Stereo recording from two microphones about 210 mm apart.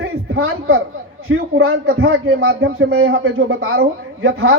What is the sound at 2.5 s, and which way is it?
A man's voice, 60° right (ahead or behind).